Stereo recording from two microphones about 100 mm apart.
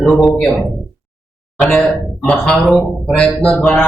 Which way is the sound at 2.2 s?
10° left (ahead or behind).